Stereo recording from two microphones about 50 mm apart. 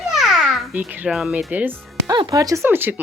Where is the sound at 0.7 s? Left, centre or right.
Right.